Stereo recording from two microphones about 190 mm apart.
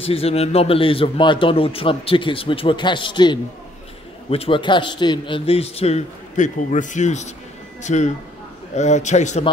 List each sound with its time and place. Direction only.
0.0 s a man's voice: 30° left (ahead or behind)